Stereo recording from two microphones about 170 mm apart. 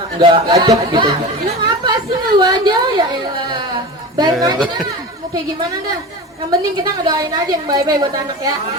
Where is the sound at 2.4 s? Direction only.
25° right (ahead or behind).